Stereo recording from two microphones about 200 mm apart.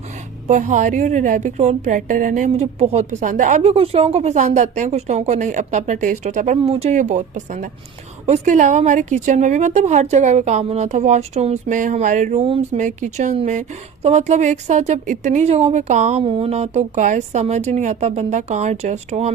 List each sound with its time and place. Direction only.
0.4 s a woman's voice: 35° right (ahead or behind)